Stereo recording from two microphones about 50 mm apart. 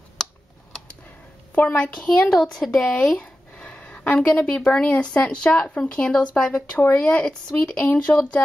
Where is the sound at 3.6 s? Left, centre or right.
Left.